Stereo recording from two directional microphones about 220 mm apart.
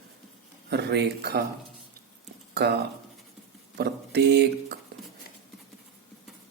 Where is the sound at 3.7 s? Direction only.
50° right (ahead or behind).